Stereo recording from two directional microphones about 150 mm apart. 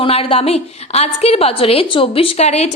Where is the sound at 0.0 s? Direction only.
40° left (ahead or behind).